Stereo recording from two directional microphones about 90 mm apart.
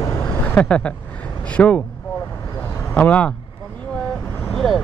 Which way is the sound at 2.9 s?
15° left (ahead or behind).